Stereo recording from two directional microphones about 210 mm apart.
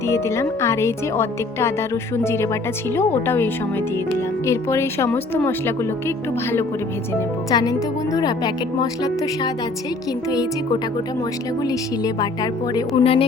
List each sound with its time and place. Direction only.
0.1 s a woman's voice: 15° left (ahead or behind)